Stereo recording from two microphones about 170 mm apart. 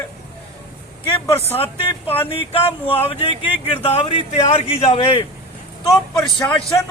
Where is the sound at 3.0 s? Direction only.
35° left (ahead or behind).